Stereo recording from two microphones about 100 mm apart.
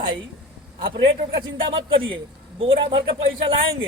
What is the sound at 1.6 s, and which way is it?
A man's voice, 60° right (ahead or behind).